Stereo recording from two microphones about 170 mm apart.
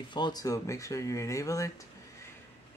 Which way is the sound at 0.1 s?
25° left (ahead or behind).